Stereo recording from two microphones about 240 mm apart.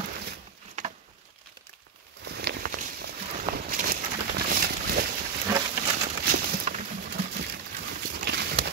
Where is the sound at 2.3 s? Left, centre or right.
Right.